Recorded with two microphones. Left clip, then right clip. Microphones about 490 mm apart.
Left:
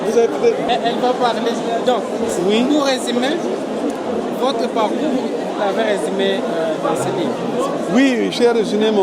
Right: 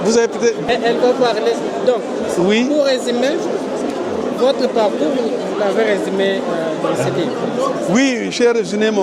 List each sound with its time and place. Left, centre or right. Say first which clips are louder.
0.1 s a sound: left 1 dB; right
0.7 s speech: right 2 dB; centre
2.7 s speech: right 2 dB; centre
5.8 s speech: right 2 dB; centre
7.9 s speech: left 4 dB; centre